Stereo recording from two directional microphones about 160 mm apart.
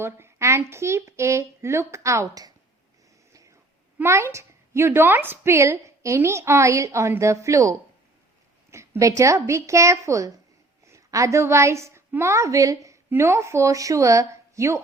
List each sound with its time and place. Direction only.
0.0 s a woman's voice: 15° right (ahead or behind)
3.9 s a woman's voice: 15° right (ahead or behind)